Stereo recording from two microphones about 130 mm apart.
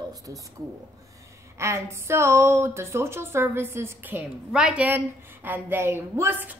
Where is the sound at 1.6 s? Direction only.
20° right (ahead or behind).